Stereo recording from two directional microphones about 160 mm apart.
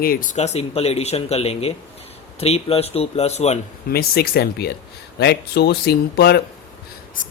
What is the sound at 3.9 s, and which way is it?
Speech, 70° left (ahead or behind).